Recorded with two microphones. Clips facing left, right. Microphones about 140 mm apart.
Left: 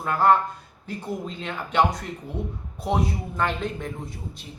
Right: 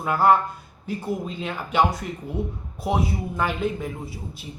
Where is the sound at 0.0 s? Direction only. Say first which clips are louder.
Right 1 dB; 10° right (ahead or behind).